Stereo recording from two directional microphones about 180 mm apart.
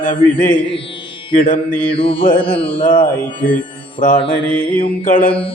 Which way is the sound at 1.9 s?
30° left (ahead or behind).